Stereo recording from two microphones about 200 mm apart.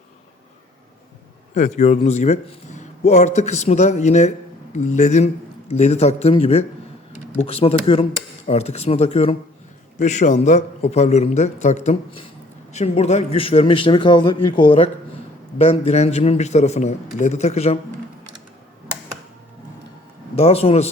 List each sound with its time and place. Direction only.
1.5 s a man's voice: 35° left (ahead or behind)
20.3 s speech: 30° left (ahead or behind)